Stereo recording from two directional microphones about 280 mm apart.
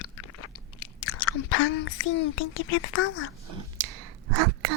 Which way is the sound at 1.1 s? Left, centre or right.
Left.